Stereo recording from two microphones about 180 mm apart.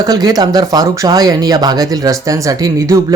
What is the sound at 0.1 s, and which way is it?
Speech, 20° right (ahead or behind).